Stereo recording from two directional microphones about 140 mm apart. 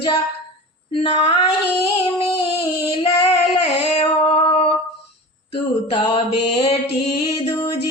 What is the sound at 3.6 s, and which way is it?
Singing, 50° left (ahead or behind).